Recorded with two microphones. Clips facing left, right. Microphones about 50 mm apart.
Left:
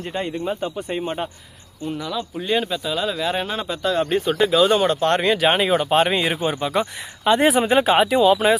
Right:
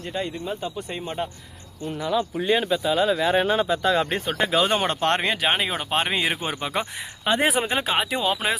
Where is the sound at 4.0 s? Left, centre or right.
Right.